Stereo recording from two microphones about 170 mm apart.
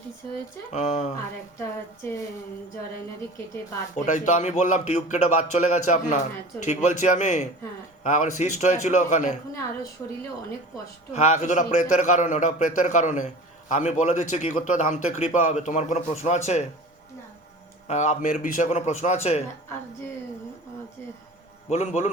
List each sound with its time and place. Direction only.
0.7 s a man's voice: 45° left (ahead or behind)
4.0 s a man's voice: 45° left (ahead or behind)
11.1 s a man's voice: 40° left (ahead or behind)
17.8 s a man's voice: 40° left (ahead or behind)
21.7 s a man's voice: 40° left (ahead or behind)